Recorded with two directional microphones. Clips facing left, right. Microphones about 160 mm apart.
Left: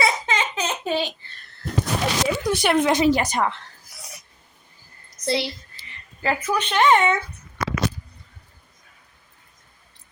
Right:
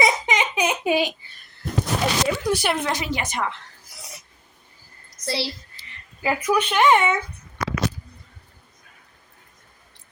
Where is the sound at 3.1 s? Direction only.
35° left (ahead or behind).